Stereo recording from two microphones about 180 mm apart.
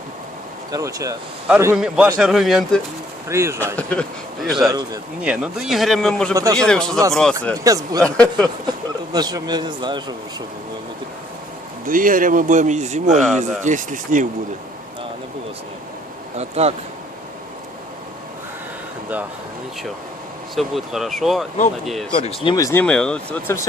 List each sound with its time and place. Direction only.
0.7 s a man's voice: 20° right (ahead or behind); by 2.8 s centre (ahead or behind)
3.2 s a man's voice: 15° right (ahead or behind)
3.8 s speech: 10° left (ahead or behind)
5.2 s a man's voice: 5° right (ahead or behind)
6.3 s a man's voice: 15° right (ahead or behind)
6.6 s a man's voice: 5° left (ahead or behind)
7.5 s a man's voice: 20° right (ahead or behind)
8.0 s a man's voice: 5° left (ahead or behind)
9.1 s a man's voice: 20° right (ahead or behind)
11.9 s speech: 50° right (ahead or behind)
16.4 s speech: 35° right (ahead or behind)
20.6 s a man's voice: centre (ahead or behind)
22.1 s speech: 30° left (ahead or behind)
22.5 s speech: 15° left (ahead or behind)